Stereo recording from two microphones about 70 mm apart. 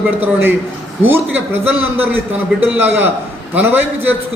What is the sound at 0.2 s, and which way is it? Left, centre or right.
A man's voice, right.